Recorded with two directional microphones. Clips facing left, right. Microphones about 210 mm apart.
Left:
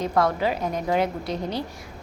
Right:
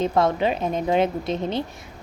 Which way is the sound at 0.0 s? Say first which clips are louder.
Right 2 dB; 25° right (ahead or behind).